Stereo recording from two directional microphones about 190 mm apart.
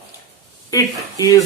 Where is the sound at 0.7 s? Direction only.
20° left (ahead or behind).